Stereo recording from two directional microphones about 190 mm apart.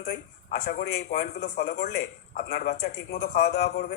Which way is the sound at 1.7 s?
60° left (ahead or behind).